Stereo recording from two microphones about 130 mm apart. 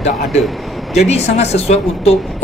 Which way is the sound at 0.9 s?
55° left (ahead or behind).